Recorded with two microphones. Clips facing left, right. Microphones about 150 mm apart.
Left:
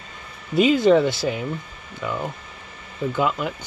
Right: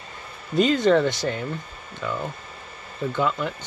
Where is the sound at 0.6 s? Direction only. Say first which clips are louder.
Left 3 dB; 5° left (ahead or behind).